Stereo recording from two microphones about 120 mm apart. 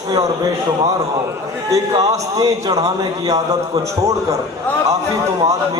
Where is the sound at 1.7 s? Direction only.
30° right (ahead or behind).